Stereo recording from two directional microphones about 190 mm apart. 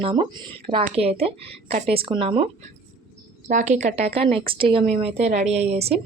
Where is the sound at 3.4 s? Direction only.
40° right (ahead or behind).